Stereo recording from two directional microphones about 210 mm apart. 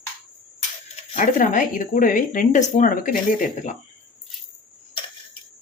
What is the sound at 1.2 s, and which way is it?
Speech, 40° left (ahead or behind).